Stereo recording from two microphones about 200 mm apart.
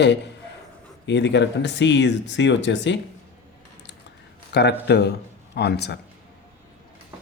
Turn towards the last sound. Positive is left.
turn(degrees=55)  # may be behind; listen again after turning